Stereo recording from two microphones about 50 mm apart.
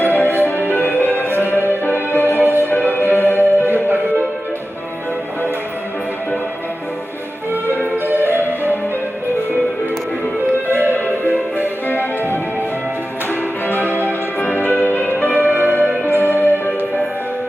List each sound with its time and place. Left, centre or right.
0.0 s music: left
2.3 s music: right
2.9 s music: left
3.7 s music: right
8.0 s music: right
11.0 s music: left
13.7 s music: left